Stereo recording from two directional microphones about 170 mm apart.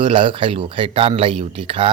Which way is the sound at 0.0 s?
30° right (ahead or behind).